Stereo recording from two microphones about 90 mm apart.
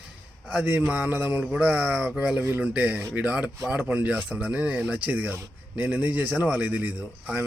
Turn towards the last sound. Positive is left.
turn(degrees=-20)  # may be behind; listen again after turning